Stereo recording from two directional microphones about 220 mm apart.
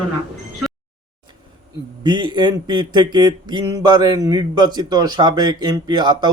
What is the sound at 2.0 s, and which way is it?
Speech, 20° right (ahead or behind).